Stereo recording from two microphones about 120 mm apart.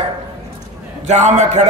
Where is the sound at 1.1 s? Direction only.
75° right (ahead or behind).